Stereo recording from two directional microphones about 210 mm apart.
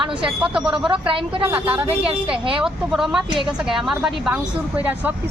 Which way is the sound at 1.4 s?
10° right (ahead or behind).